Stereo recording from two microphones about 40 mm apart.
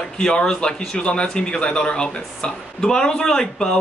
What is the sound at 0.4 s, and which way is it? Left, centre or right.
Speech, left.